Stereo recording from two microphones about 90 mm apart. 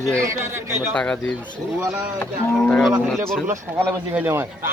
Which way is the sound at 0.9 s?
10° left (ahead or behind).